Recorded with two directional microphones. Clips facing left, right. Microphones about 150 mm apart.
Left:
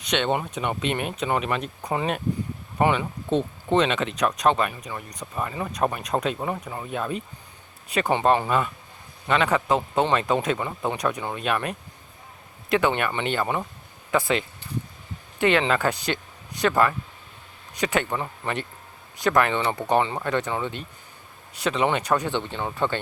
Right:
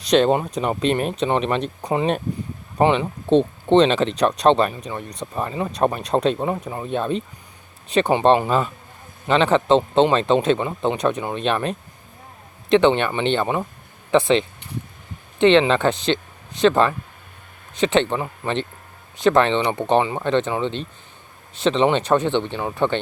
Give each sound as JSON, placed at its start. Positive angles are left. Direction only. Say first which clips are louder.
{"t": 0.0, "sound": "speech", "louder": "right 8 dB", "side_deg": -35}